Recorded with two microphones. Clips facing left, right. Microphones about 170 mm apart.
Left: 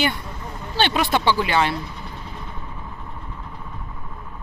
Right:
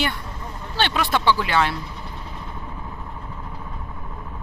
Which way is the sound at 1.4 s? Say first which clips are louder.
Left 1 dB; 10° left (ahead or behind).